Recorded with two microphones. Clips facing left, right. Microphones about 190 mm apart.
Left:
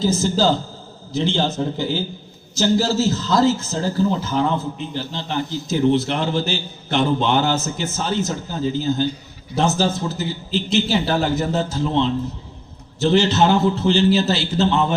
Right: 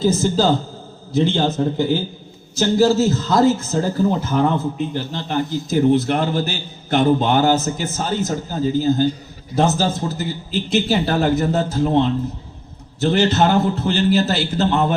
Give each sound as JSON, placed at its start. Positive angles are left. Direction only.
{"t": 1.1, "sound": "a man's voice", "side_deg": -55}